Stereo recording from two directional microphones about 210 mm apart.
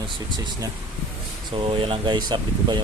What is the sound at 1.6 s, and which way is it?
Speech, 25° right (ahead or behind).